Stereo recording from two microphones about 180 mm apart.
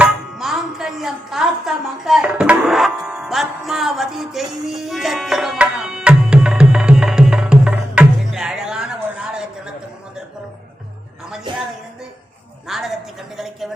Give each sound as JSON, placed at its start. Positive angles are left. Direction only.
{"t": 0.0, "sound": "music", "side_deg": 0}
{"t": 12.6, "sound": "a woman's voice", "side_deg": 0}